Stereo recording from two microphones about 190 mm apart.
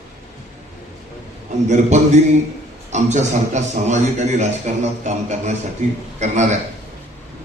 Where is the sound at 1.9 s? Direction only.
40° right (ahead or behind).